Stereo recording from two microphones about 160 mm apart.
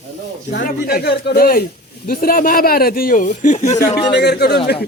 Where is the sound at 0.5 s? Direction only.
80° left; by 3.8 s 50° left (ahead or behind).